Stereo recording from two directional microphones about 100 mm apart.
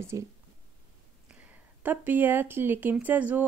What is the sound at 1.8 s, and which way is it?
Speech, 20° right (ahead or behind).